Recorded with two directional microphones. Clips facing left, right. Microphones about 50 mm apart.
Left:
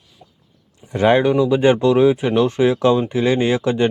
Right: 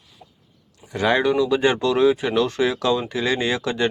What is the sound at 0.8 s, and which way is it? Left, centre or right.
Speech, left.